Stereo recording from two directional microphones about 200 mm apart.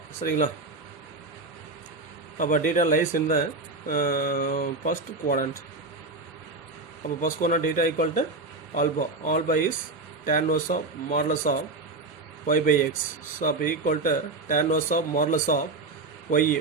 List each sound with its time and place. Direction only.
0.2 s speech: 45° left (ahead or behind)
2.4 s speech: 40° left (ahead or behind)
7.2 s speech: 40° left (ahead or behind)